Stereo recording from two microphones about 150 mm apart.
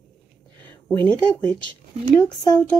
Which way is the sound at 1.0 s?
10° left (ahead or behind).